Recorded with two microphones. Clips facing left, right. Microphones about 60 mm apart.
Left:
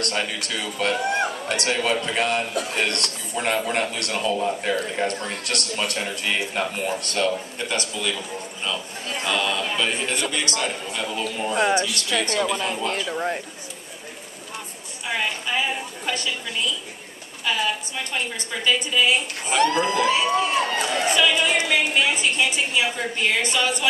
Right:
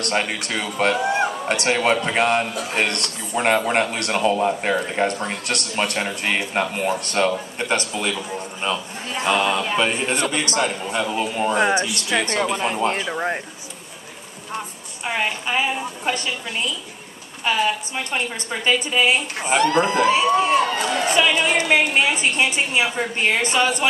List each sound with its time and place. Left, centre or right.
0.0 s a woman's voice: right
5.0 s a woman's voice: right
11.5 s a woman's voice: right
15.0 s a woman's voice: right
17.5 s a woman's voice: right